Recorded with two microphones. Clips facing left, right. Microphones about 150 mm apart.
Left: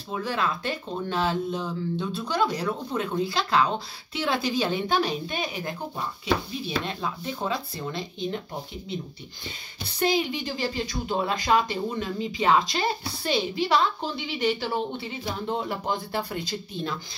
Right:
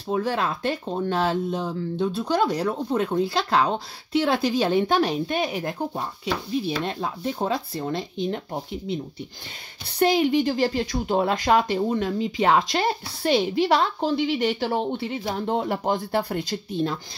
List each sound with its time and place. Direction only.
0.1 s speech: 55° right (ahead or behind)
6.6 s speech: 50° right (ahead or behind)
9.9 s speech: 60° right (ahead or behind)